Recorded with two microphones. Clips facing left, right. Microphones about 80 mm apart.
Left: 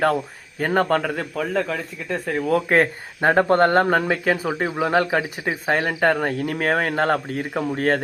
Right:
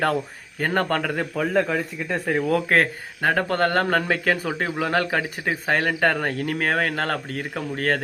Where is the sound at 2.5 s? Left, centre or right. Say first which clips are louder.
Left 3 dB; centre.